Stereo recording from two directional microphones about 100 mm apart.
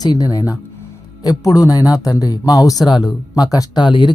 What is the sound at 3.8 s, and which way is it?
Speech, 55° left (ahead or behind).